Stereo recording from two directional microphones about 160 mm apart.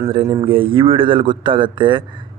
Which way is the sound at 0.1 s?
30° right (ahead or behind).